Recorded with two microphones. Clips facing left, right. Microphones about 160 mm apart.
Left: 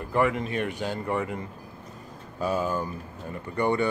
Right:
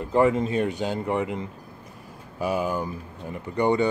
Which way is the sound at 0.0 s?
25° right (ahead or behind).